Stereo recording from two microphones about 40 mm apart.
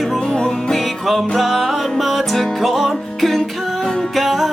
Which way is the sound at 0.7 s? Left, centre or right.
Centre.